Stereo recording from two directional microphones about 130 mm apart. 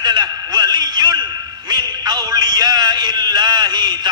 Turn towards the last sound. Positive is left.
turn(degrees=-35)  # may be behind; listen again after turning